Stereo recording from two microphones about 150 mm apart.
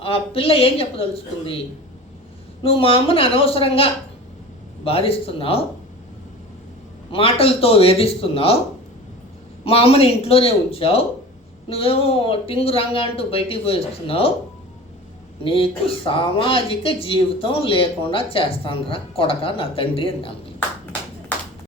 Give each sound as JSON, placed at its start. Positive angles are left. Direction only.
{"t": 0.0, "sound": "speech", "side_deg": 40}
{"t": 2.6, "sound": "speech", "side_deg": 40}
{"t": 7.1, "sound": "speech", "side_deg": 40}
{"t": 9.6, "sound": "speech", "side_deg": 40}
{"t": 15.4, "sound": "speech", "side_deg": 40}